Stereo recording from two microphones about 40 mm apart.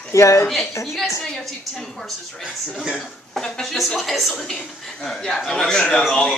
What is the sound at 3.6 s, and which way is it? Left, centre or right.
A woman's voice, centre.